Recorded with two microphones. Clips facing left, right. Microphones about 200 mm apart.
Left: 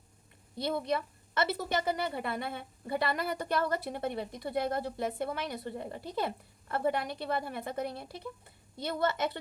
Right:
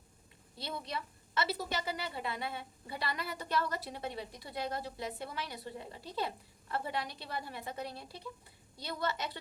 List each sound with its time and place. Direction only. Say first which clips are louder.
0.6 s a woman's voice: left 9 dB; 55° left (ahead or behind)